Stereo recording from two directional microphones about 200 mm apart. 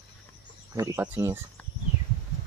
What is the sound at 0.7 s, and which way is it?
Speech, 10° right (ahead or behind).